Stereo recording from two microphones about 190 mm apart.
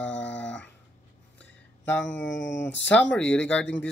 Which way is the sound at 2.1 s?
70° left (ahead or behind).